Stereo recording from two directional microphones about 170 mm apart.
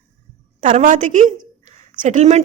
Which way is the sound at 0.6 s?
45° right (ahead or behind).